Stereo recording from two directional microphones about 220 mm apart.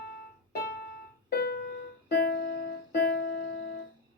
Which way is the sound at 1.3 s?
45° left (ahead or behind).